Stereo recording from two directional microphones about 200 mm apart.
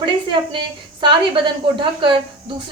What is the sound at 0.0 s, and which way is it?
Speech, 25° right (ahead or behind).